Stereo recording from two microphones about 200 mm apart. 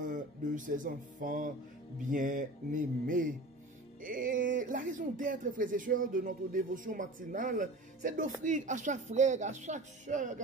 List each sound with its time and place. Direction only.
0.0 s speech: 40° right (ahead or behind)